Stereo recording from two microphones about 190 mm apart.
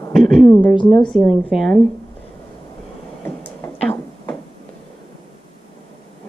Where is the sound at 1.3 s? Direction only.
Centre (ahead or behind).